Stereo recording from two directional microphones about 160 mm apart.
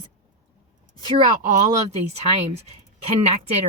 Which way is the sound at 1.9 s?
40° right (ahead or behind).